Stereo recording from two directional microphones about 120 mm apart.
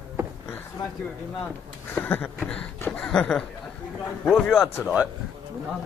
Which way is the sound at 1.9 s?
15° left (ahead or behind).